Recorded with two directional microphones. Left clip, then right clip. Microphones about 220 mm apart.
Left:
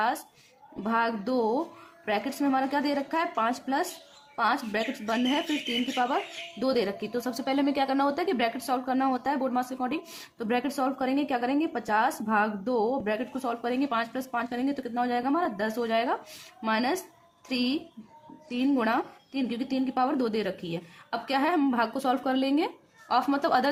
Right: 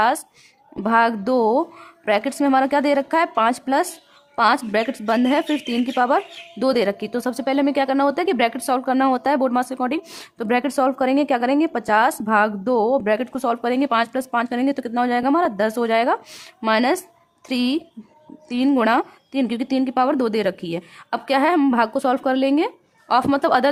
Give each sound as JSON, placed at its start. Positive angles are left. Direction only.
{"t": 0.8, "sound": "speech", "side_deg": -40}